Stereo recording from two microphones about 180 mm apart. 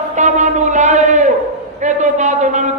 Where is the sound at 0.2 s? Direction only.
40° right (ahead or behind).